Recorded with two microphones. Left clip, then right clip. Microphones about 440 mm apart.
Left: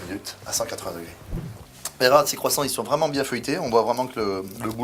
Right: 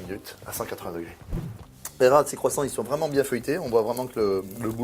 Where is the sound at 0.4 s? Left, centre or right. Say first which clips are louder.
Left 5 dB; right.